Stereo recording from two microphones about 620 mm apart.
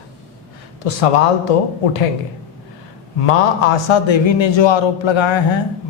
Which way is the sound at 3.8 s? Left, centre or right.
Left.